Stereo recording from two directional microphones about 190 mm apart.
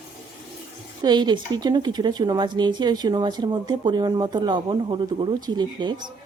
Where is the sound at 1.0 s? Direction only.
20° right (ahead or behind).